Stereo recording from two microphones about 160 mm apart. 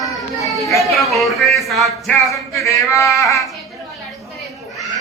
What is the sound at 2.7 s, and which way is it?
Speech, 20° left (ahead or behind).